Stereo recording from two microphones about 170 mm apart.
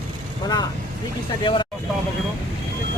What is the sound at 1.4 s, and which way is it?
Speech, 25° left (ahead or behind).